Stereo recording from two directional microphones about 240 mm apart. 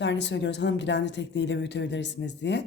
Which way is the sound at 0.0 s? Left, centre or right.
Left.